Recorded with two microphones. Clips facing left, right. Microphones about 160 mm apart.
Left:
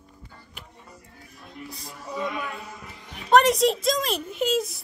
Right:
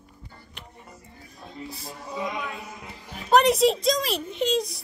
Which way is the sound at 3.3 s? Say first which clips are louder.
Even; centre (ahead or behind).